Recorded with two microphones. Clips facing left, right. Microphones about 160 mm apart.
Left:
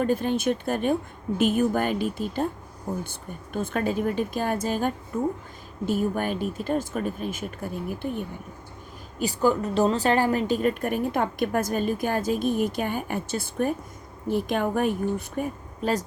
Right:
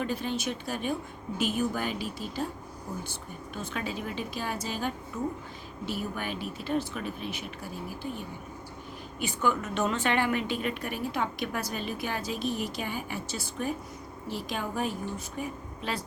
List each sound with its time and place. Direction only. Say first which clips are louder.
0.0 s a woman's voice: left 8 dB; 50° left (ahead or behind)
9.1 s a woman's voice: left 6 dB; 35° left (ahead or behind); by 14.9 s 55° left (ahead or behind)
15.4 s speech: left 6 dB; 40° left (ahead or behind)